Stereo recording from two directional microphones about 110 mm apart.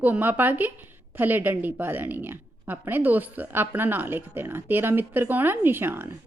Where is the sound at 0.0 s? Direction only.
15° right (ahead or behind).